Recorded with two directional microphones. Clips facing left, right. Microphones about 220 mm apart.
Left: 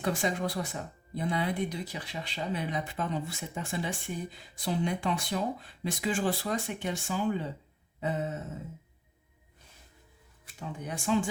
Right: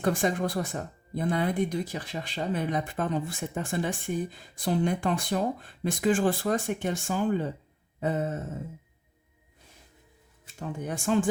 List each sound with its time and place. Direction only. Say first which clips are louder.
0.0 s speech: right 4 dB; 50° right (ahead or behind)
10.6 s speech: right 4 dB; 50° right (ahead or behind)